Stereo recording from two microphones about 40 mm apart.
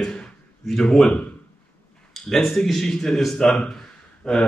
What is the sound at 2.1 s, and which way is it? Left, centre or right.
Speech, centre.